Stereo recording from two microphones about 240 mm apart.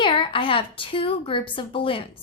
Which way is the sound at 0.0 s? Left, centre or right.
Left.